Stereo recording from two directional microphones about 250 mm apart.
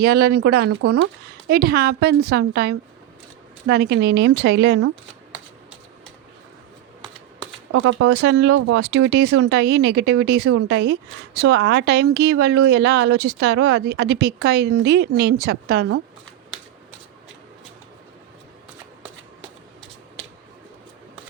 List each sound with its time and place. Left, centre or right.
0.0 s speech: right
7.7 s speech: right